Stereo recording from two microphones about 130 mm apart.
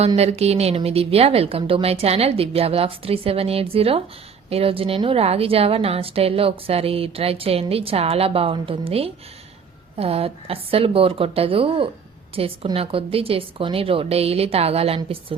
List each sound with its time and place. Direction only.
0.2 s a woman's voice: 55° right (ahead or behind)